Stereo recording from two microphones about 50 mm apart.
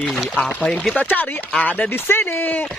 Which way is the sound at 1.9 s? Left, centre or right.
Left.